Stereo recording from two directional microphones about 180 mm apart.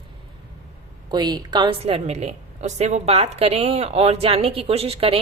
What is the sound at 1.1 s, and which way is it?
A woman's voice, 25° right (ahead or behind).